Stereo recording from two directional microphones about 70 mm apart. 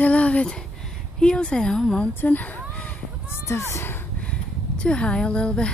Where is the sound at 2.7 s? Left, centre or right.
Left.